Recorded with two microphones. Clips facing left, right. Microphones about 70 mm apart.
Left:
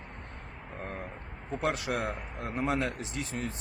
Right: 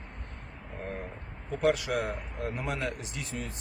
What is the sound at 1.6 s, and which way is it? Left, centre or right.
A man's voice, left.